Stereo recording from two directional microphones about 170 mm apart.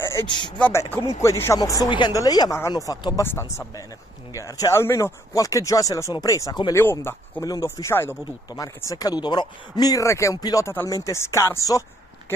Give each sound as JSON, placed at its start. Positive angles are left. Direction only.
{"t": 0.0, "sound": "a sound", "side_deg": 15}
{"t": 0.3, "sound": "speech", "side_deg": 25}
{"t": 0.6, "sound": "speech", "side_deg": 10}